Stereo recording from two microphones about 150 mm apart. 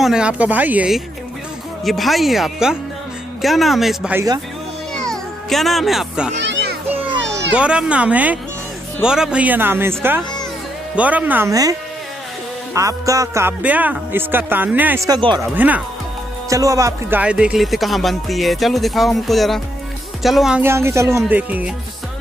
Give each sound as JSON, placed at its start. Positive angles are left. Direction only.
{"t": 0.0, "sound": "speech", "side_deg": -5}
{"t": 4.1, "sound": "speech", "side_deg": -20}
{"t": 4.9, "sound": "music", "side_deg": 5}
{"t": 7.5, "sound": "speech", "side_deg": -5}
{"t": 12.7, "sound": "speech", "side_deg": -20}
{"t": 15.0, "sound": "speech", "side_deg": -30}
{"t": 15.5, "sound": "speech", "side_deg": -10}
{"t": 16.4, "sound": "speech", "side_deg": -20}
{"t": 17.2, "sound": "speech", "side_deg": -5}
{"t": 20.6, "sound": "speech", "side_deg": -15}